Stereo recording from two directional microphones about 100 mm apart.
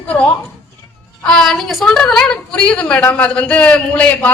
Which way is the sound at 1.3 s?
5° left (ahead or behind).